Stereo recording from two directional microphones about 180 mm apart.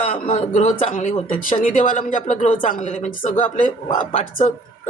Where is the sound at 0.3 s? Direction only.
40° left (ahead or behind).